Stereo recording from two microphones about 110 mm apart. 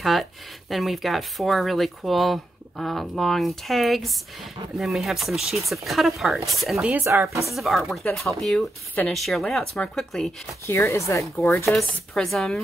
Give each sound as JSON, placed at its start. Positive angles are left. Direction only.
{"t": 0.0, "sound": "speech", "side_deg": 0}
{"t": 6.9, "sound": "speech", "side_deg": -25}
{"t": 7.4, "sound": "speech", "side_deg": 0}
{"t": 10.7, "sound": "speech", "side_deg": 25}
{"t": 11.6, "sound": "speech", "side_deg": 5}